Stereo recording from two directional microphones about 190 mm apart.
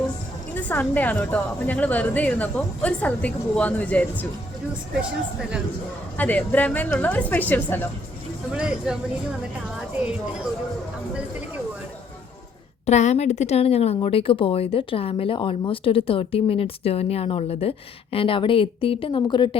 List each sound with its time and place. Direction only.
0.5 s a woman's voice: 10° left (ahead or behind)
4.9 s speech: 5° right (ahead or behind)
6.1 s a woman's voice: 10° left (ahead or behind)
8.5 s speech: 5° right (ahead or behind)
12.8 s a woman's voice: 35° left (ahead or behind)